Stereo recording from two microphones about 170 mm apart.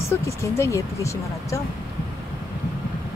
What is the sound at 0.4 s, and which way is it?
Speech, 15° left (ahead or behind).